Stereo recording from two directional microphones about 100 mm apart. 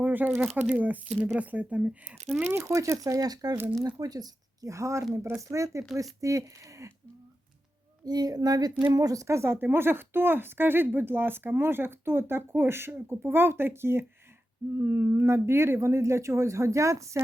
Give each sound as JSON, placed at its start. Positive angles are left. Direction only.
{"t": 0.0, "sound": "speech", "side_deg": -15}
{"t": 2.4, "sound": "speech", "side_deg": -25}
{"t": 8.0, "sound": "speech", "side_deg": -40}